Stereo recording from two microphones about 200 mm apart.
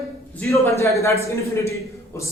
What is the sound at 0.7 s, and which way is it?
A man's voice, 15° left (ahead or behind).